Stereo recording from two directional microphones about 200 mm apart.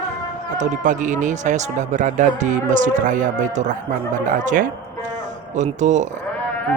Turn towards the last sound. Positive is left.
turn(degrees=-35)  # may be behind; listen again after turning